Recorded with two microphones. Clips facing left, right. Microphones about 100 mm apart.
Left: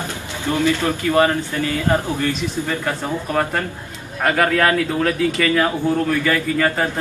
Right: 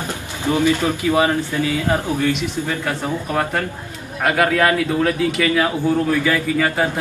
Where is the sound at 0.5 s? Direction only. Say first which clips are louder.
Right 1 dB; 15° right (ahead or behind).